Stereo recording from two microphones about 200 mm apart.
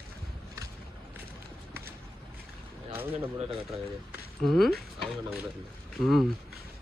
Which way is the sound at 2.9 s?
10° right (ahead or behind).